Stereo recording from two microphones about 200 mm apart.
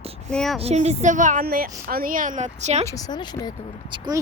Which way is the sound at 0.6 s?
35° right (ahead or behind).